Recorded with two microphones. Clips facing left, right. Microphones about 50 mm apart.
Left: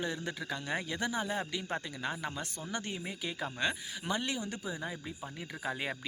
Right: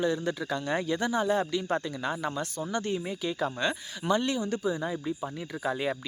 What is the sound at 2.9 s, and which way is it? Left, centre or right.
Speech, centre.